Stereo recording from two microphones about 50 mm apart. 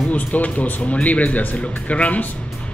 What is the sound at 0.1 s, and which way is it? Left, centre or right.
Speech, left.